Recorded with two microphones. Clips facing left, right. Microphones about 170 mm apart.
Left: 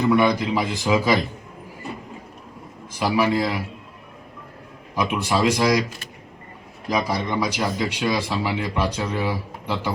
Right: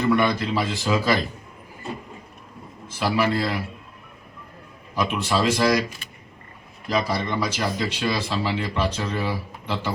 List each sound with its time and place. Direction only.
0.0 s speech: 15° left (ahead or behind)
2.8 s speech: 15° left (ahead or behind)
4.9 s speech: 15° left (ahead or behind)
6.8 s speech: 15° left (ahead or behind)